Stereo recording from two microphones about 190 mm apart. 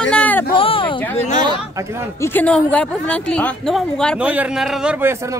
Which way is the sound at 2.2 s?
10° left (ahead or behind).